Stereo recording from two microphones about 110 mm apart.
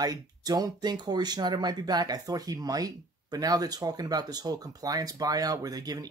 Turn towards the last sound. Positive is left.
turn(degrees=-35)  # may be behind; listen again after turning